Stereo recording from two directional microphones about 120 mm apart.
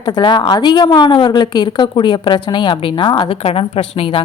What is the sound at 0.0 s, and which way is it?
A woman's voice, 40° left (ahead or behind).